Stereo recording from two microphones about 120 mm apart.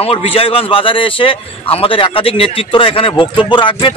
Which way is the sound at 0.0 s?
55° left (ahead or behind).